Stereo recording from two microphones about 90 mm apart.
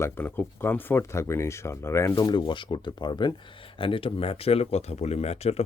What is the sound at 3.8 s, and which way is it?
Speech, 75° left (ahead or behind).